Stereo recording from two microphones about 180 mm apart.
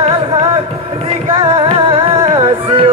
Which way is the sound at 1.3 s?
30° right (ahead or behind).